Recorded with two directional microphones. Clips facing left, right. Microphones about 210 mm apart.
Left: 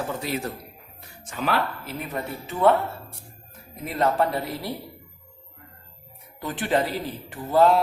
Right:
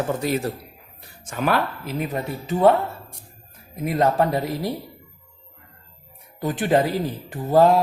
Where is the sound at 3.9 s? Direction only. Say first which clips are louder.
Right 3 dB; 45° right (ahead or behind).